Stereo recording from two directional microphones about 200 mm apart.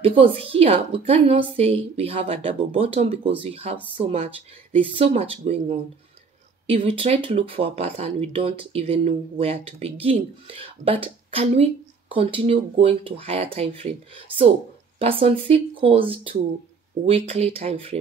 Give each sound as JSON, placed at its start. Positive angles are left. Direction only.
{"t": 0.0, "sound": "speech", "side_deg": -25}